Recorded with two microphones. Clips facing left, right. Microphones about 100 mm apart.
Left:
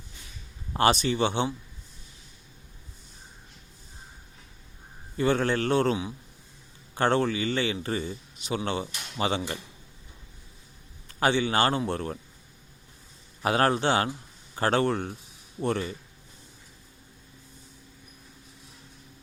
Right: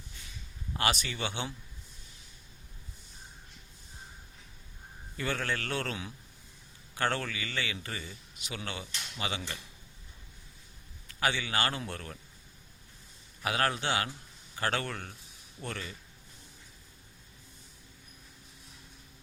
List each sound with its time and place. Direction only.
0.7 s a man's voice: 30° left (ahead or behind)
5.1 s a man's voice: 30° left (ahead or behind)
11.1 s a man's voice: 30° left (ahead or behind)
13.4 s a man's voice: 35° left (ahead or behind)